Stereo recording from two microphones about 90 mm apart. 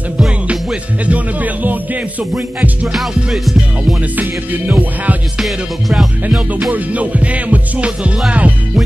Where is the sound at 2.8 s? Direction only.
Centre (ahead or behind).